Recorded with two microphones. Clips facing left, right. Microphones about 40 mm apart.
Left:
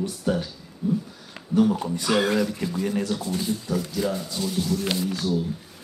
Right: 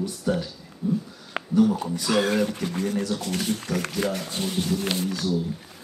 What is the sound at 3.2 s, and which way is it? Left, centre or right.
Speech, right.